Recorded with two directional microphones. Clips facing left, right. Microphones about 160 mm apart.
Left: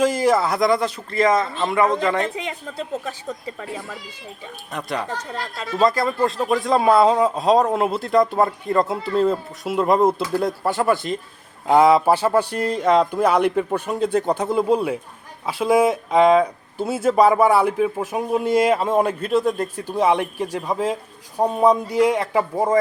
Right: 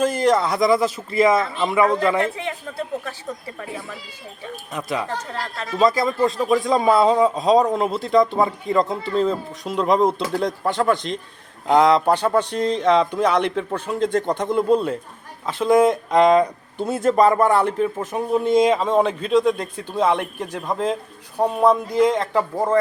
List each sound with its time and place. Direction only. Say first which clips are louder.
0.0 s a man's voice: even; 10° left (ahead or behind)
2.4 s a woman's voice: right 1 dB; 15° left (ahead or behind)
4.7 s a man's voice: right 1 dB; centre (ahead or behind)